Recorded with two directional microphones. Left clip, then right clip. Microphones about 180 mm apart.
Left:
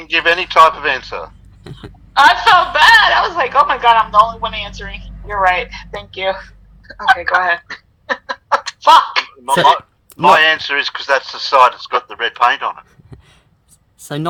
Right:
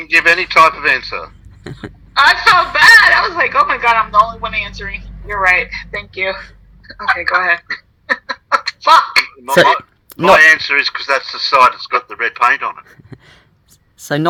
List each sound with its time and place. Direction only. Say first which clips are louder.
0.0 s a man's voice: right 3 dB; 25° right (ahead or behind)